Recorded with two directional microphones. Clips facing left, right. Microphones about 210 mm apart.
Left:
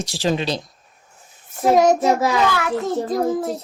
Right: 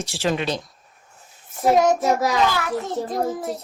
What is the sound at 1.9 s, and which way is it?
Speech, 30° left (ahead or behind).